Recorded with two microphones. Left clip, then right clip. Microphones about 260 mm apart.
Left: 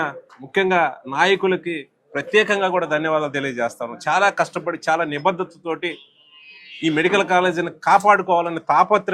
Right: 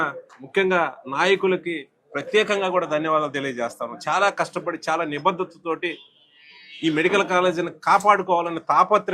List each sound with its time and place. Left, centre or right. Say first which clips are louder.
0.0 s a man's voice: even; left